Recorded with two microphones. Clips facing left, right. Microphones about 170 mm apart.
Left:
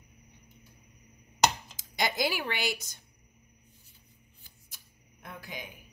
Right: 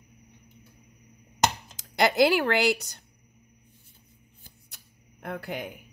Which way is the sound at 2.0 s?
70° right (ahead or behind).